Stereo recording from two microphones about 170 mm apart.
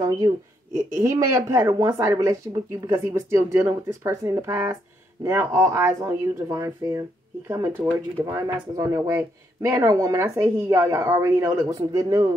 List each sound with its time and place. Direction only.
0.9 s speech: 15° right (ahead or behind)